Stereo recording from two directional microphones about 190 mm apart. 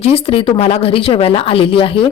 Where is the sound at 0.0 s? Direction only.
30° left (ahead or behind).